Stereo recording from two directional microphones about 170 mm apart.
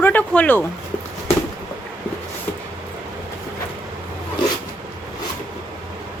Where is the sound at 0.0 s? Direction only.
10° left (ahead or behind).